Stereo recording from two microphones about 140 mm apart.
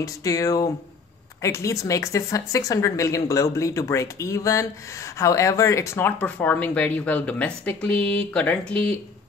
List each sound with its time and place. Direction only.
0.0 s speech: 25° left (ahead or behind)